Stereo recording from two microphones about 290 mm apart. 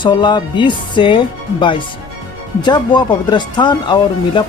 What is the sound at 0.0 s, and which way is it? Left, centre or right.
Speech, centre.